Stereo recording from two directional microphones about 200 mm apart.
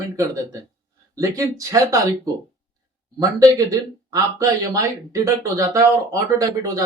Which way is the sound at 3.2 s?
15° right (ahead or behind).